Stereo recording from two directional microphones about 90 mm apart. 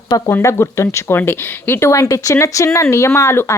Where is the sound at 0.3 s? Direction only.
30° left (ahead or behind).